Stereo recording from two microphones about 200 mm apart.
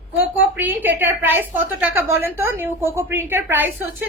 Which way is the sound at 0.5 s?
10° right (ahead or behind).